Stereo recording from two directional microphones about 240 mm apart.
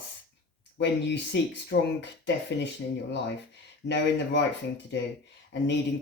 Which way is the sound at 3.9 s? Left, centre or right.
Left.